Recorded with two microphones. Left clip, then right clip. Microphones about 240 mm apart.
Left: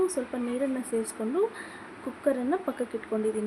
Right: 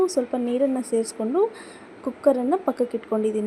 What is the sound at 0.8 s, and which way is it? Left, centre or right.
A woman's voice, centre.